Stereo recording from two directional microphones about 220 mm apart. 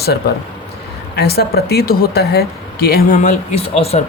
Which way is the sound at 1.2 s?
45° left (ahead or behind).